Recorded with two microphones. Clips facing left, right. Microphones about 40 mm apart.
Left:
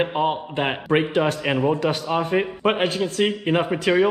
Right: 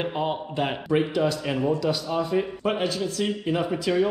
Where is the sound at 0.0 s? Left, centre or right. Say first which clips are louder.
Left 5 dB; left.